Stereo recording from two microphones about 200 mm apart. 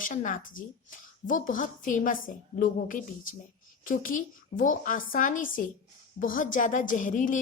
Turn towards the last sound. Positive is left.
turn(degrees=40)  # may be behind; listen again after turning